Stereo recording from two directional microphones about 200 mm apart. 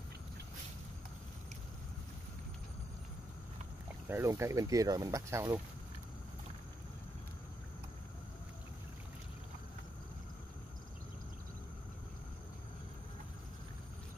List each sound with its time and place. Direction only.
4.1 s speech: 15° right (ahead or behind)